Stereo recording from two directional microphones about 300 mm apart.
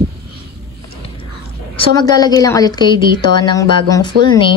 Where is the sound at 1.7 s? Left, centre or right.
Centre.